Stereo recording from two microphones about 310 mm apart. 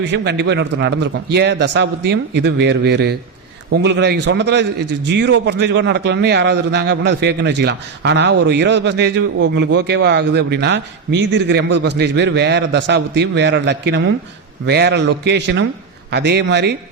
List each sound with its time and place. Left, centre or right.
0.0 s a man's voice: right